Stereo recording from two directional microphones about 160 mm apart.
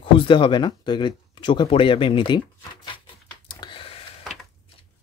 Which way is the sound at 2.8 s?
30° left (ahead or behind).